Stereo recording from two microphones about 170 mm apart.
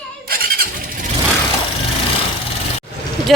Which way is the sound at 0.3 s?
60° right (ahead or behind).